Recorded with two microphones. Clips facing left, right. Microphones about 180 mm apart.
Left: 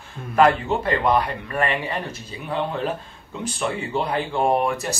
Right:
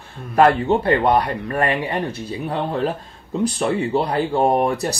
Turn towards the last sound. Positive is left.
turn(degrees=-40)  # may be behind; listen again after turning